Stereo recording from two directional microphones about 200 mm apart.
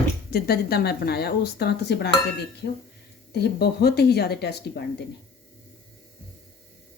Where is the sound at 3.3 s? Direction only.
55° left (ahead or behind).